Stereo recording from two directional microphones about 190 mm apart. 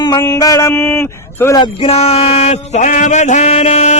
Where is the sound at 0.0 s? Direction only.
20° left (ahead or behind).